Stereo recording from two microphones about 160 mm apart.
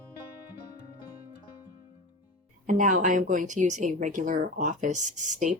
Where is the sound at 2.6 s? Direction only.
55° right (ahead or behind).